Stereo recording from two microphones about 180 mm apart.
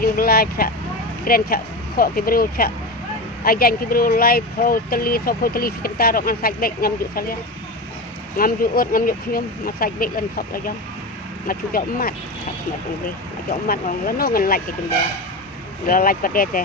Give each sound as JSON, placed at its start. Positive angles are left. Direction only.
{"t": 0.0, "sound": "speech", "side_deg": 55}
{"t": 8.4, "sound": "speech", "side_deg": 55}
{"t": 13.5, "sound": "speech", "side_deg": 50}
{"t": 15.9, "sound": "speech", "side_deg": 55}